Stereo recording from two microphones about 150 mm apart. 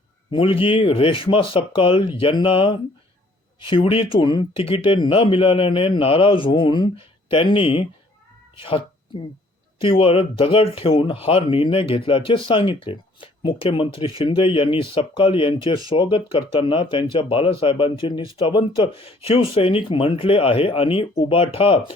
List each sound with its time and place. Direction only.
0.3 s speech: 35° left (ahead or behind)
9.8 s speech: 35° left (ahead or behind)